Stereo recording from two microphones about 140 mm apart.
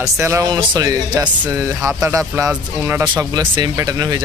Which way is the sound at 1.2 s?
15° right (ahead or behind).